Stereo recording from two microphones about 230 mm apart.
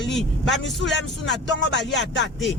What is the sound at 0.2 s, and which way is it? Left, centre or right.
Speech, centre.